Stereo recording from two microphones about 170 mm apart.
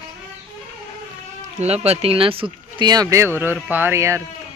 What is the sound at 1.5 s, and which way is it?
Speech, 40° right (ahead or behind).